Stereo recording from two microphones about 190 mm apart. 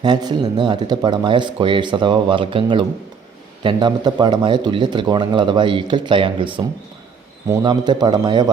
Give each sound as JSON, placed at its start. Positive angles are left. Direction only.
{"t": 0.0, "sound": "speech", "side_deg": -25}